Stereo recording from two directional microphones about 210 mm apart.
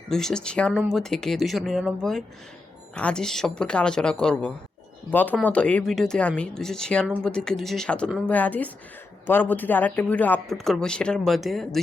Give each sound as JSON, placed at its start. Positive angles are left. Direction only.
{"t": 0.1, "sound": "speech", "side_deg": 5}